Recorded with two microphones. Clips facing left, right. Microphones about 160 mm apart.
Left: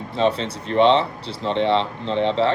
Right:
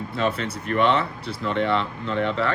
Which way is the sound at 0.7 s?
25° left (ahead or behind).